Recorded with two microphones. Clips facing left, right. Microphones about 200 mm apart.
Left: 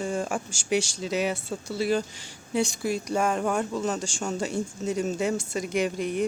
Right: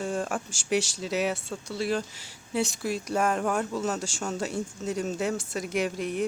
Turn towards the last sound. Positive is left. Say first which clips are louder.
# left 2 dB
turn(degrees=0)  # may be behind; listen again after turning